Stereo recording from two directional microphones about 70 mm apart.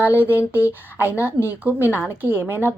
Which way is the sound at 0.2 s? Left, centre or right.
Right.